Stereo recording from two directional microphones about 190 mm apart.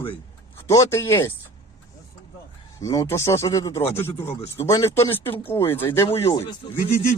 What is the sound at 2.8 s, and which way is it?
Speech, 15° left (ahead or behind).